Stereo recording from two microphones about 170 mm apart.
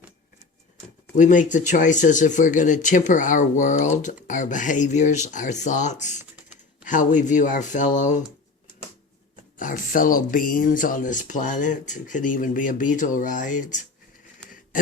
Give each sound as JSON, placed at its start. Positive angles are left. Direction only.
{"t": 1.1, "sound": "speech", "side_deg": 50}
{"t": 9.3, "sound": "speech", "side_deg": 50}
{"t": 14.4, "sound": "patter", "side_deg": 5}